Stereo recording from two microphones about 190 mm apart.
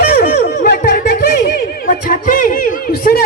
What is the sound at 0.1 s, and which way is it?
Music, 55° left (ahead or behind).